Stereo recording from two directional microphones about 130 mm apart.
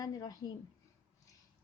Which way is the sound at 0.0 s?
30° left (ahead or behind).